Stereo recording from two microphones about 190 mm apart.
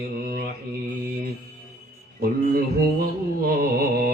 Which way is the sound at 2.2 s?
50° right (ahead or behind).